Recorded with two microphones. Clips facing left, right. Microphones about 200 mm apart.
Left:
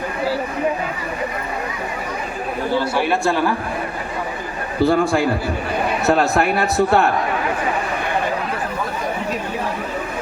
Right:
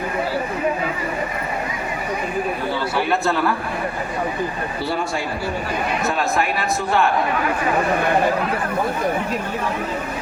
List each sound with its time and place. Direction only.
4.8 s a man's voice: 50° left (ahead or behind)
6.1 s a man's voice: 65° left (ahead or behind)